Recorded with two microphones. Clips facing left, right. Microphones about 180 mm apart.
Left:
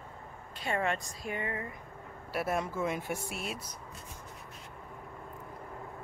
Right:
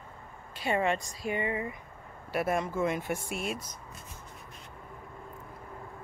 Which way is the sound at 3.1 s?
50° right (ahead or behind).